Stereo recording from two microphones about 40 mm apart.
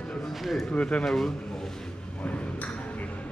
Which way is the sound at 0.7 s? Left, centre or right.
Left.